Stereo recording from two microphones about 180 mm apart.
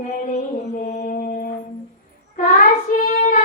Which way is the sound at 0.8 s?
45° left (ahead or behind).